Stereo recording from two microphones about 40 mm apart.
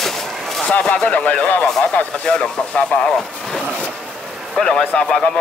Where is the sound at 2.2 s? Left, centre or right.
Left.